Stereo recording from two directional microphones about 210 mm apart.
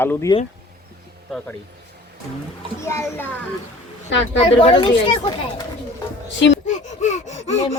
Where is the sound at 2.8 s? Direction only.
15° left (ahead or behind).